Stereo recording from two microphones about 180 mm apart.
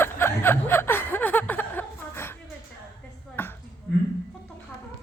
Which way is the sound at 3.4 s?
10° left (ahead or behind).